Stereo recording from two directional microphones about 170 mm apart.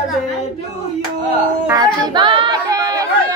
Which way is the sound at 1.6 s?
20° right (ahead or behind).